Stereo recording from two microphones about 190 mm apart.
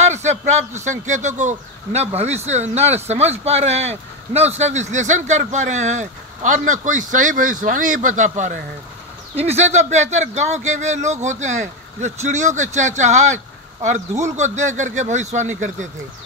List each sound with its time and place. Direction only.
0.0 s speech: 35° right (ahead or behind)